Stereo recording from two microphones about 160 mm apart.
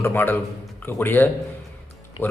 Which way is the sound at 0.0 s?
15° left (ahead or behind).